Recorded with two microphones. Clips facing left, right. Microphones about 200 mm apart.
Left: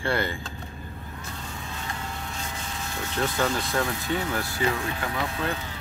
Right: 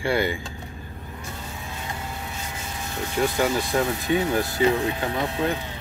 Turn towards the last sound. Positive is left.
turn(degrees=-25)  # may be behind; listen again after turning